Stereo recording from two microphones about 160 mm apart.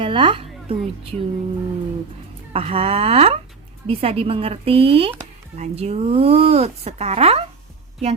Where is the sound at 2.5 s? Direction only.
35° right (ahead or behind).